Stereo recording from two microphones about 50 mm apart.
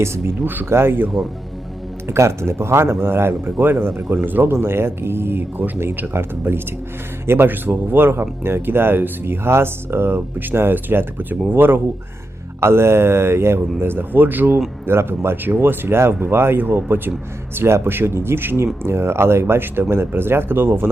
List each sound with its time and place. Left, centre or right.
0.0 s speech: right
0.3 s speech: right
0.7 s speech: right
2.0 s speech: right
4.5 s speech: right
12.5 s speech: right
14.8 s speech: right
17.5 s speech: right